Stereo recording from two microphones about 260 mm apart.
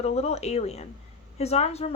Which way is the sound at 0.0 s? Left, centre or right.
Left.